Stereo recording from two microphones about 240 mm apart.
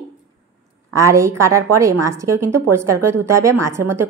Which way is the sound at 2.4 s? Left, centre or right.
Right.